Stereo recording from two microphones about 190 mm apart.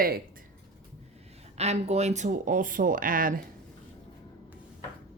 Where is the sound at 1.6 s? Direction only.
35° right (ahead or behind).